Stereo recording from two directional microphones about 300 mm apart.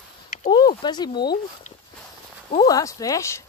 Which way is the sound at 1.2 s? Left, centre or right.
Left.